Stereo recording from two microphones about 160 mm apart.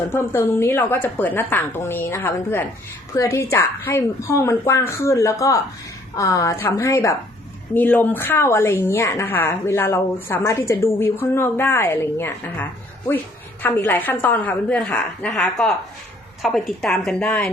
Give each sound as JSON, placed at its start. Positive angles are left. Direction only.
{"t": 0.1, "sound": "a woman's voice", "side_deg": 15}